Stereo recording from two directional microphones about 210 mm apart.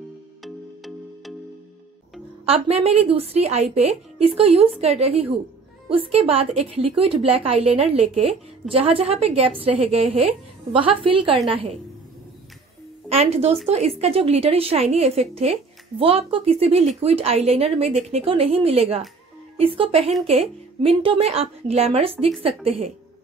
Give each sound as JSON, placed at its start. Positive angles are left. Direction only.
{"t": 0.4, "sound": "music", "side_deg": 0}
{"t": 2.4, "sound": "a woman's voice", "side_deg": -30}
{"t": 13.1, "sound": "a woman's voice", "side_deg": -30}